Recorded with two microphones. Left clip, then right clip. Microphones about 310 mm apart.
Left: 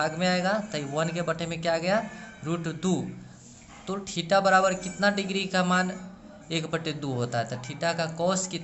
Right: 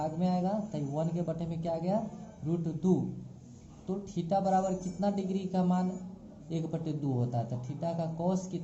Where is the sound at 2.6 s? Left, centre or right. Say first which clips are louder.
Even; left.